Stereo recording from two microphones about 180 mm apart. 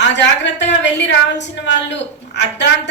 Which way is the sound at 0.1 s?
80° left.